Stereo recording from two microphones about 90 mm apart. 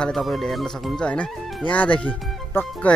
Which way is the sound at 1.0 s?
15° left (ahead or behind).